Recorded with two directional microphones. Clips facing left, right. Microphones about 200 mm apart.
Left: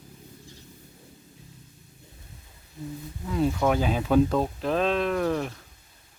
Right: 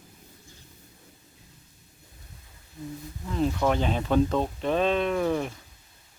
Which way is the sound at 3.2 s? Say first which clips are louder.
Left 1 dB; 5° left (ahead or behind).